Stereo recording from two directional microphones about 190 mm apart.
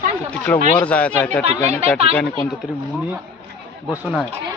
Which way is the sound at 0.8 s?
5° left (ahead or behind).